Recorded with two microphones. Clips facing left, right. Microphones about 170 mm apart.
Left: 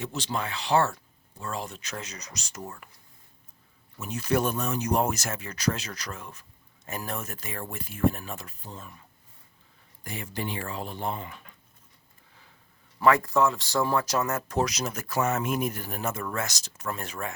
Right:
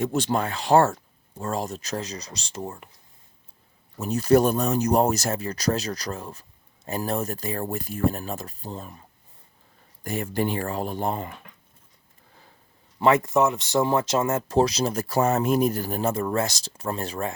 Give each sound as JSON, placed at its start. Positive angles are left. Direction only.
{"t": 0.0, "sound": "speech", "side_deg": -50}
{"t": 3.9, "sound": "speech", "side_deg": -40}
{"t": 13.0, "sound": "speech", "side_deg": -20}